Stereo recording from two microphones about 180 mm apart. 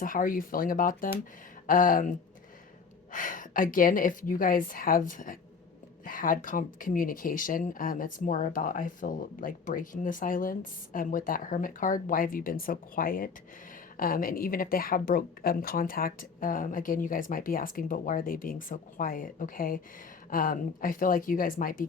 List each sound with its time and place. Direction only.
0.0 s speech: 50° left (ahead or behind)